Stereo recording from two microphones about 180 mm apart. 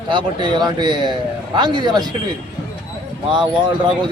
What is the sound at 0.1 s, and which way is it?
Speech, 25° right (ahead or behind).